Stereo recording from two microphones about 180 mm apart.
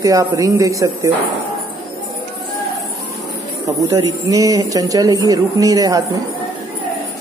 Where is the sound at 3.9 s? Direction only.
20° right (ahead or behind).